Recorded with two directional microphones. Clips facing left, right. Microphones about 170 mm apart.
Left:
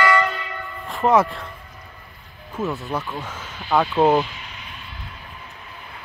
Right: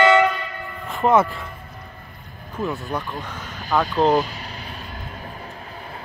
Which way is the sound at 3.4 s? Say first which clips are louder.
Right 1 dB; 45° right (ahead or behind).